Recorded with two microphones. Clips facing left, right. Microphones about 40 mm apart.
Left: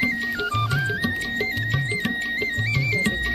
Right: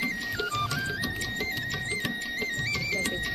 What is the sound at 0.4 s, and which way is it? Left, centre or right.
Music, left.